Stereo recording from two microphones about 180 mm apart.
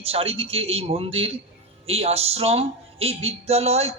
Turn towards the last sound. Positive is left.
turn(degrees=-35)  # may be behind; listen again after turning